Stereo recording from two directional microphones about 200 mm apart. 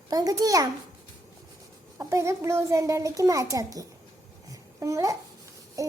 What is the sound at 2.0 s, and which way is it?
A child's voice, 15° right (ahead or behind).